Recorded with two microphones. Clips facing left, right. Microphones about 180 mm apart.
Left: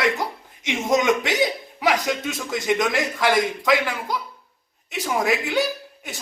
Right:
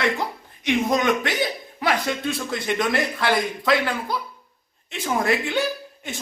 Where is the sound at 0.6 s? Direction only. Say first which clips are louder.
Even; 20° left (ahead or behind).